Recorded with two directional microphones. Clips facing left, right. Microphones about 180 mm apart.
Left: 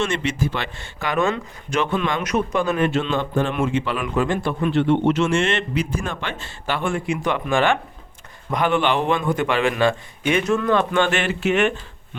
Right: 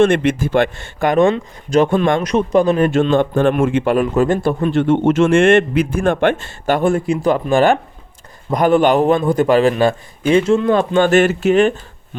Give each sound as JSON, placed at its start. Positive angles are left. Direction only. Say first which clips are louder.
{"t": 0.0, "sound": "a man's voice", "louder": "right 9 dB", "side_deg": -55}
{"t": 1.2, "sound": "a man's voice", "louder": "right 6 dB", "side_deg": -30}
{"t": 1.8, "sound": "a man's voice", "louder": "right 8 dB", "side_deg": -45}
{"t": 2.2, "sound": "a man's voice", "louder": "right 7 dB", "side_deg": -35}
{"t": 2.9, "sound": "a man's voice", "louder": "right 7 dB", "side_deg": -50}